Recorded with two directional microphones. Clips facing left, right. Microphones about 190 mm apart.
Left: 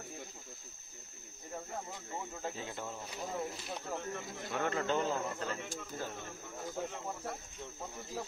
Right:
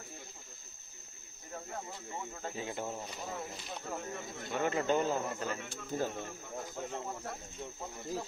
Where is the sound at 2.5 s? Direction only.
15° right (ahead or behind).